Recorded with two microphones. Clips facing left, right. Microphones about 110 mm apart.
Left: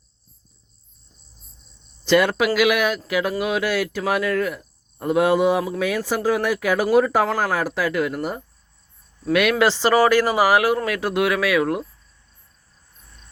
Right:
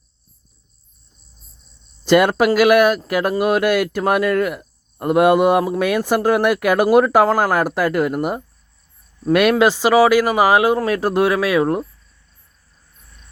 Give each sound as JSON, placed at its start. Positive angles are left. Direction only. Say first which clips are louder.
{"t": 2.0, "sound": "speech", "louder": "right 4 dB", "side_deg": -50}
{"t": 9.6, "sound": "speech", "louder": "right 4 dB", "side_deg": -15}
{"t": 10.8, "sound": "speech", "louder": "right 4 dB", "side_deg": -35}